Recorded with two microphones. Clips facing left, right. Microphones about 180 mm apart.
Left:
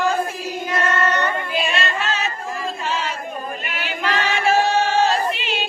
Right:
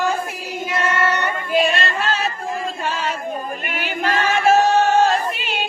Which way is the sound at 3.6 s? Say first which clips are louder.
Right 3 dB; 50° right (ahead or behind).